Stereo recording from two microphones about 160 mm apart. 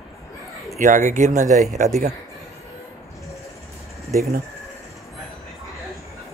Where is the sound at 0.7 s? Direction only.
50° right (ahead or behind).